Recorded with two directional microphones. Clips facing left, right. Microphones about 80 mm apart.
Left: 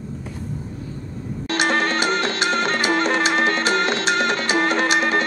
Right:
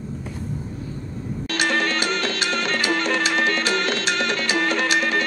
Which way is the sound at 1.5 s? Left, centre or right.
Left.